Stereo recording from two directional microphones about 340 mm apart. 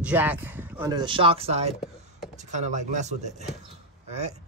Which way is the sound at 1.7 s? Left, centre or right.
Centre.